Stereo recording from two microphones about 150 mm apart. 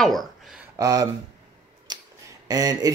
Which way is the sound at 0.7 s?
25° right (ahead or behind).